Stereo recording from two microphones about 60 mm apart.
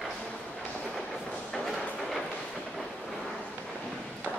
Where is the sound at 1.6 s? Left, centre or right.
Centre.